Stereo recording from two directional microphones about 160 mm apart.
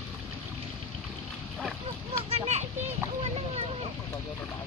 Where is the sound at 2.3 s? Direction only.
45° right (ahead or behind).